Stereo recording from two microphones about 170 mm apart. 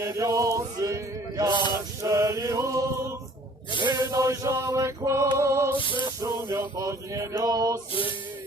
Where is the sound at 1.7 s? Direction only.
20° right (ahead or behind).